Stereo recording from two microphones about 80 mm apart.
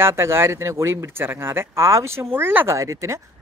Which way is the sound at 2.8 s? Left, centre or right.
Right.